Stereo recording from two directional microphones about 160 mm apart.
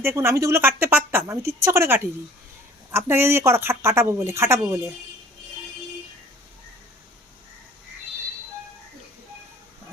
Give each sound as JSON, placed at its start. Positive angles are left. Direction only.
{"t": 0.0, "sound": "speech", "side_deg": -15}